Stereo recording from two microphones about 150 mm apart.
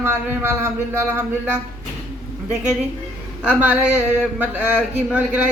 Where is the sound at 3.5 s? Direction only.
10° right (ahead or behind).